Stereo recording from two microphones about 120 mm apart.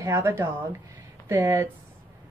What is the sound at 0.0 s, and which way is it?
A woman's voice, 25° right (ahead or behind).